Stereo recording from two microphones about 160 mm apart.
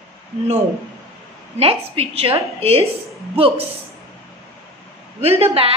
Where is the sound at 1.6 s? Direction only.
35° right (ahead or behind).